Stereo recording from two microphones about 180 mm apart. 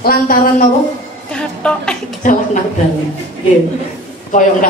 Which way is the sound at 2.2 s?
45° left (ahead or behind).